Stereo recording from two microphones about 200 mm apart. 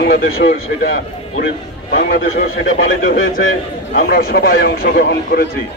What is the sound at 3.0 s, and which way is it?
A man's voice, 45° left (ahead or behind).